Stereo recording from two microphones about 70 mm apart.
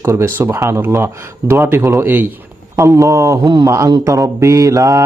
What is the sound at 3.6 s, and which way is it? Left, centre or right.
Mantra, right.